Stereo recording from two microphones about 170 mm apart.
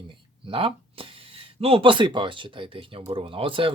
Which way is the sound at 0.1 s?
30° right (ahead or behind).